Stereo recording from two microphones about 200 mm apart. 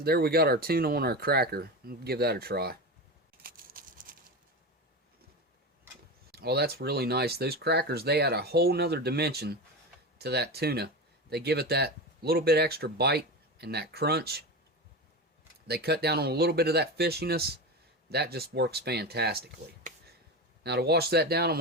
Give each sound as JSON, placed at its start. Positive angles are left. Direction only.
{"t": 0.0, "sound": "speech", "side_deg": -50}
{"t": 3.4, "sound": "a sound", "side_deg": -45}
{"t": 6.3, "sound": "speech", "side_deg": -55}
{"t": 15.6, "sound": "speech", "side_deg": -55}
{"t": 20.7, "sound": "speech", "side_deg": -55}